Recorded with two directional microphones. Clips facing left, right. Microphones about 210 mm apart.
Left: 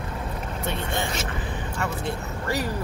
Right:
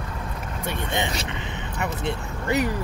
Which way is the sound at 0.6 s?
15° right (ahead or behind).